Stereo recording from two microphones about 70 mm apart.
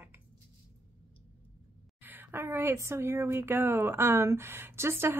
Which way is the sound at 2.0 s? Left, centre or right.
Right.